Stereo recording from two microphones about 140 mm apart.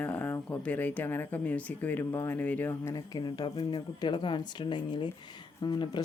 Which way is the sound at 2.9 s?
30° left (ahead or behind).